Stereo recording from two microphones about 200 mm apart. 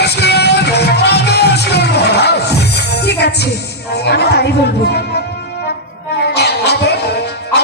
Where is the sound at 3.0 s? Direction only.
55° left (ahead or behind).